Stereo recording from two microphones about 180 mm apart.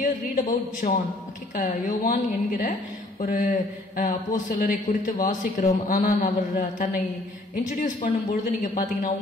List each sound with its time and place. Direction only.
0.0 s a man's voice: 45° left (ahead or behind)